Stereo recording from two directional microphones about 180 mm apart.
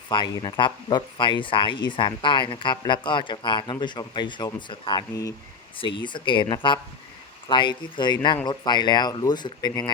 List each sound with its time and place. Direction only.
0.1 s speech: 25° left (ahead or behind)